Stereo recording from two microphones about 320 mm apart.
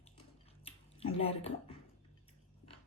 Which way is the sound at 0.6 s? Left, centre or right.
Centre.